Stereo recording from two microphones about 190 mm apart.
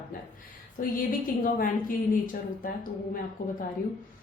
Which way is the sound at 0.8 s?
45° left (ahead or behind).